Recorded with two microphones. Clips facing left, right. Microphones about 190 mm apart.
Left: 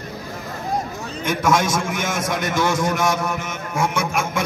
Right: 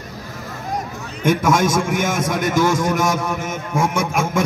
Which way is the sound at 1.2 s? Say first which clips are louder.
Right 3 dB; 50° right (ahead or behind).